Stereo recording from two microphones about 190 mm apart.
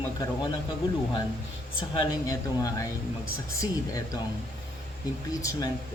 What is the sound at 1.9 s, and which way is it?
Speech, 20° left (ahead or behind).